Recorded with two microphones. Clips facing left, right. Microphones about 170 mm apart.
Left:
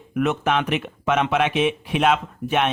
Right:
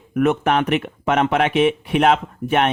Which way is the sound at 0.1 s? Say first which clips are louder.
Right 4 dB; 50° right (ahead or behind).